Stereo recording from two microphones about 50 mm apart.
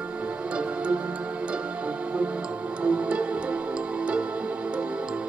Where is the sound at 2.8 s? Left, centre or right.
Right.